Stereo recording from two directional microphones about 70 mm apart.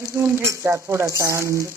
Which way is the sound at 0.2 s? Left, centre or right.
Right.